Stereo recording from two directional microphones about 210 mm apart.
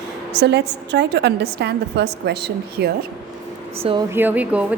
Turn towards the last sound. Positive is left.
turn(degrees=-5)  # may be behind; listen again after turning